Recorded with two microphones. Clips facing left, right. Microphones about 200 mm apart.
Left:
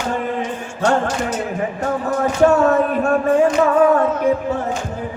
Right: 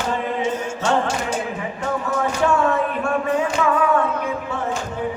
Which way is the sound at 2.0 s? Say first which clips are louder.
Left 7 dB; 40° left (ahead or behind).